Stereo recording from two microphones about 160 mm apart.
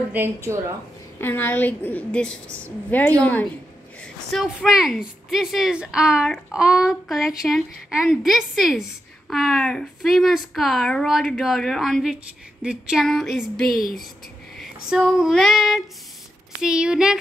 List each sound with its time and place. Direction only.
0.1 s a woman's voice: 15° right (ahead or behind)
1.2 s a woman's voice: 10° left (ahead or behind)
13.7 s speech: 65° left (ahead or behind)
14.6 s female singing: 5° right (ahead or behind)
16.6 s speech: 5° right (ahead or behind)